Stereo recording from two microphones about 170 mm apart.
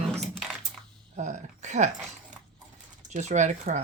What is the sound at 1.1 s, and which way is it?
Speech, 45° right (ahead or behind).